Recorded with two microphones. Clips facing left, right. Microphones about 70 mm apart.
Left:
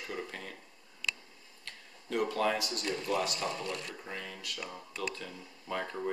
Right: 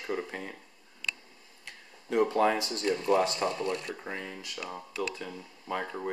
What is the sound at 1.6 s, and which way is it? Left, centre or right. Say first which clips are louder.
Speech: right 4 dB; centre.